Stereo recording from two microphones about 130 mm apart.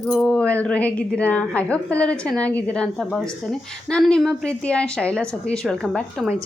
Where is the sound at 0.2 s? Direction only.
10° left (ahead or behind).